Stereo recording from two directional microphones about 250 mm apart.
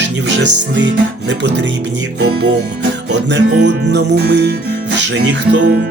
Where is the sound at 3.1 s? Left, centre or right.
Right.